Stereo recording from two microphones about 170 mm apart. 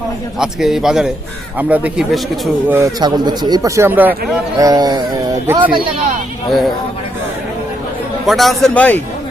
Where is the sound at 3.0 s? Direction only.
25° right (ahead or behind).